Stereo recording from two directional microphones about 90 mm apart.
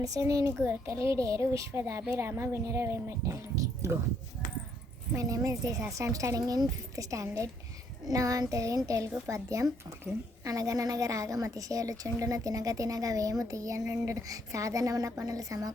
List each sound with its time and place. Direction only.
0.0 s a woman's voice: 40° right (ahead or behind)
0.4 s a child's voice: 25° right (ahead or behind)
5.1 s a woman's voice: 40° right (ahead or behind)